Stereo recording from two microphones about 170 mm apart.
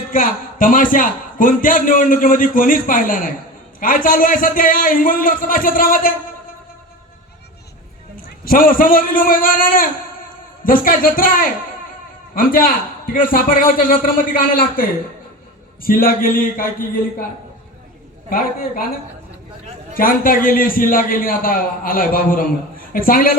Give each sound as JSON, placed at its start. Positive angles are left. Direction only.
{"t": 0.1, "sound": "a man's voice", "side_deg": 50}
{"t": 8.1, "sound": "a man's voice", "side_deg": 55}
{"t": 18.3, "sound": "a man's voice", "side_deg": 55}
{"t": 19.9, "sound": "a man's voice", "side_deg": 55}